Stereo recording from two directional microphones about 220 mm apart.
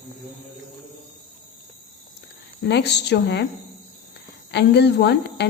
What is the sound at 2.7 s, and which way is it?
Speech, 50° left (ahead or behind).